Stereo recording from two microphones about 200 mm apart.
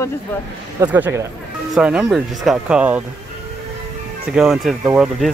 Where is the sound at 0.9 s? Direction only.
10° right (ahead or behind).